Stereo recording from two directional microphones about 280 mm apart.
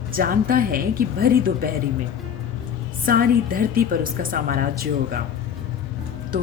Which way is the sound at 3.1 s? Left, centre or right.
Right.